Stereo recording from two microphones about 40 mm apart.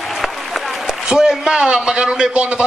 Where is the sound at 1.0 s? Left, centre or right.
Centre.